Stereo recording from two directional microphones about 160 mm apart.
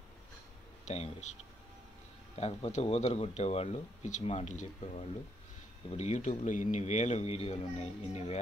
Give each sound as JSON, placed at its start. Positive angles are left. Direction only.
{"t": 0.8, "sound": "speech", "side_deg": 45}
{"t": 2.3, "sound": "speech", "side_deg": 40}